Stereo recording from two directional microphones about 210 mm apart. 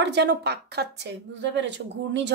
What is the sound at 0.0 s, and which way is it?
A woman's voice, 55° right (ahead or behind).